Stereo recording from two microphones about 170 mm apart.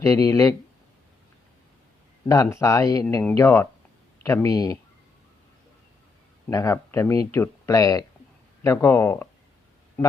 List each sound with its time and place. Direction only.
0.0 s speech: 20° left (ahead or behind)
2.2 s speech: 20° left (ahead or behind)
6.5 s speech: 20° left (ahead or behind)